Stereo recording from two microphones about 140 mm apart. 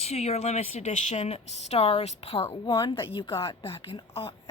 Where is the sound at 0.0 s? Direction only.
50° left (ahead or behind).